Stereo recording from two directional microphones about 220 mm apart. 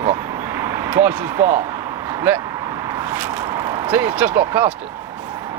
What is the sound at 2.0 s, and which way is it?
Speech, 10° right (ahead or behind).